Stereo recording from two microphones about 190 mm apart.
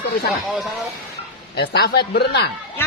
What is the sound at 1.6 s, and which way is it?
Speech, 60° left (ahead or behind).